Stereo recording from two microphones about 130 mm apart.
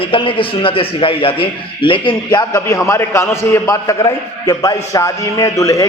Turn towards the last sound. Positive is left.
turn(degrees=25)  # may be behind; listen again after turning